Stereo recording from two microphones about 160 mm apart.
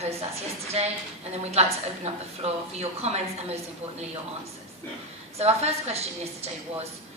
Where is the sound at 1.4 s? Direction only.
40° right (ahead or behind).